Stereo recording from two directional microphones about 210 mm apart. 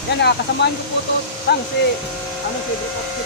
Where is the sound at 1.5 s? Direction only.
50° left (ahead or behind).